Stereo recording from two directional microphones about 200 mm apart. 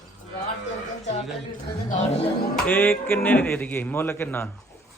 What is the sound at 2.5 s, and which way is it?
A man's voice, 10° left (ahead or behind).